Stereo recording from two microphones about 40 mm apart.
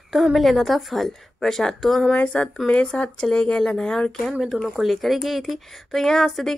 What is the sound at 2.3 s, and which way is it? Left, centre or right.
Speech, left.